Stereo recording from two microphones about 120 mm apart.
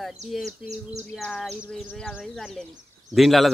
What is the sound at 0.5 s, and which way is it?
Bird, 70° right (ahead or behind).